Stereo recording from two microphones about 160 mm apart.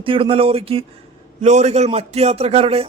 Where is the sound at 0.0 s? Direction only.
35° right (ahead or behind).